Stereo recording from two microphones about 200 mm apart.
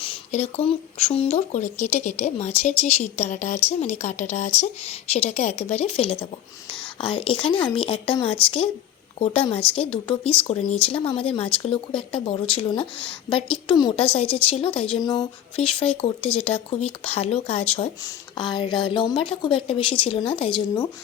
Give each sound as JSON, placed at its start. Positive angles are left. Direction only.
{"t": 0.0, "sound": "a woman's voice", "side_deg": 30}